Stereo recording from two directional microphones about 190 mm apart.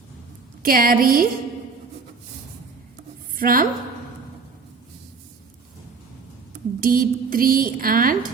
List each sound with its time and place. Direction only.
0.6 s a woman's voice: 50° right (ahead or behind)
3.3 s a woman's voice: 45° right (ahead or behind)
6.7 s a woman's voice: 50° right (ahead or behind)